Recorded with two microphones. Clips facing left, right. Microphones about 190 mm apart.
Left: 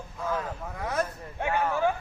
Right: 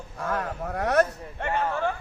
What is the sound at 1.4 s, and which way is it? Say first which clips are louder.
Speech: left 1 dB; 10° left (ahead or behind).